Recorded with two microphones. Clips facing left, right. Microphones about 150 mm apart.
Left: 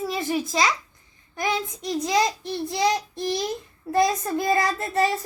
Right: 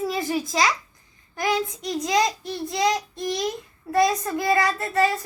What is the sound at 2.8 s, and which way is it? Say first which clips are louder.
Child singing: even; 30° left (ahead or behind).